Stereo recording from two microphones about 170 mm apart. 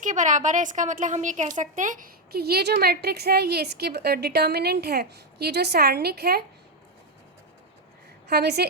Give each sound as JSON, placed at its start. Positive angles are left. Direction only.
{"t": 0.0, "sound": "a woman's voice", "side_deg": -45}
{"t": 8.3, "sound": "a woman's voice", "side_deg": -75}